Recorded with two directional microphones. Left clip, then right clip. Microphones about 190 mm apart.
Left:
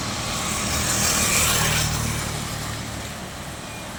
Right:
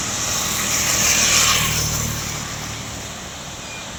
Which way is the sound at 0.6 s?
55° left (ahead or behind).